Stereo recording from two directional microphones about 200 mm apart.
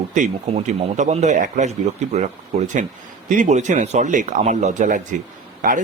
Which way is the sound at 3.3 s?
40° right (ahead or behind).